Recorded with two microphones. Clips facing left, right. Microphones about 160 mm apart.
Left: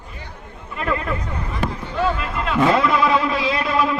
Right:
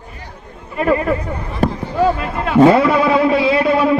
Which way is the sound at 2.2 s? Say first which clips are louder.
Right 10 dB; 30° right (ahead or behind).